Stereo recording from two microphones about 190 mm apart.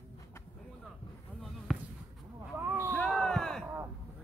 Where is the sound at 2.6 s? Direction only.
10° right (ahead or behind).